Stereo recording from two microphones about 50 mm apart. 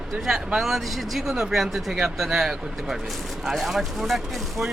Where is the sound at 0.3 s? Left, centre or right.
Centre.